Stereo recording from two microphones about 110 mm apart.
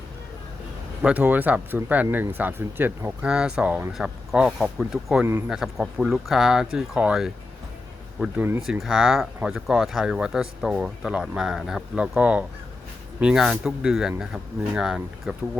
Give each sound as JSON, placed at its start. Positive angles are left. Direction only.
{"t": 1.0, "sound": "speech", "side_deg": -15}
{"t": 3.2, "sound": "speech", "side_deg": -5}
{"t": 8.4, "sound": "speech", "side_deg": -20}
{"t": 8.6, "sound": "speech", "side_deg": -5}